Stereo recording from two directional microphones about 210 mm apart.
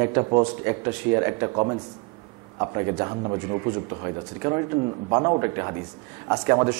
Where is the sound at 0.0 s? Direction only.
20° right (ahead or behind).